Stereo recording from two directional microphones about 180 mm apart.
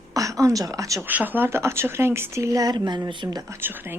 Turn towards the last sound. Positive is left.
turn(degrees=-10)  # may be behind; listen again after turning